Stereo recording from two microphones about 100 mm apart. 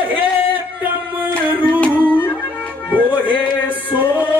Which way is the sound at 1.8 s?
15° right (ahead or behind).